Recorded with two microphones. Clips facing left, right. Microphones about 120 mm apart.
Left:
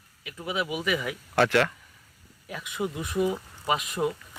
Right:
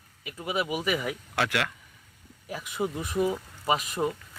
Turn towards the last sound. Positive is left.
turn(degrees=0)  # may be behind; listen again after turning